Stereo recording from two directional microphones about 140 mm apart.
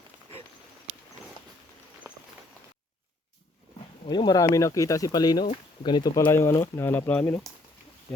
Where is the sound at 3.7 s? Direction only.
35° left (ahead or behind).